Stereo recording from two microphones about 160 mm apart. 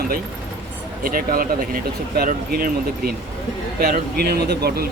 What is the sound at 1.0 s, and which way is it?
Speech, 65° right (ahead or behind).